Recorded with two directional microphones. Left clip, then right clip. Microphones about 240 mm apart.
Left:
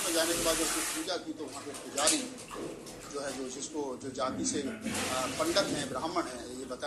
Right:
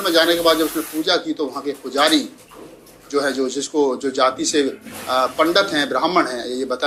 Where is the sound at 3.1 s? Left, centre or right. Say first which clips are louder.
Right 19 dB; right.